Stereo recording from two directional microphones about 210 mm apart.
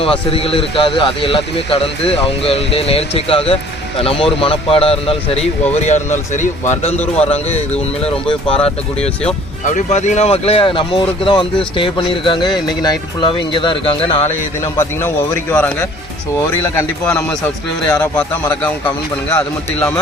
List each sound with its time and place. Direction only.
0.0 s speech: 25° left (ahead or behind)
9.6 s speech: 35° left (ahead or behind)
14.3 s speech: 10° left (ahead or behind)
18.6 s speech: 10° left (ahead or behind)